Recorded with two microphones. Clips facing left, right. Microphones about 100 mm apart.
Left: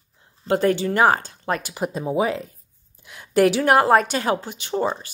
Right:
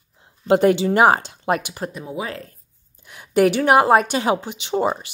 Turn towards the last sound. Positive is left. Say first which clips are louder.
# right 2 dB
turn(degrees=-10)  # may be behind; listen again after turning